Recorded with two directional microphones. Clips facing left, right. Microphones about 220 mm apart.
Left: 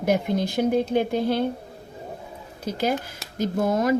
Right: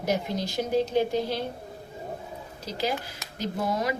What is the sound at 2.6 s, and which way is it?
Speech, 50° left (ahead or behind).